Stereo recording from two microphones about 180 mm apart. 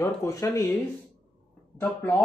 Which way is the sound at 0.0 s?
15° left (ahead or behind).